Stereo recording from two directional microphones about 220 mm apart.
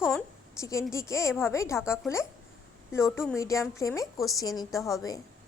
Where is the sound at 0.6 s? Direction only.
15° left (ahead or behind).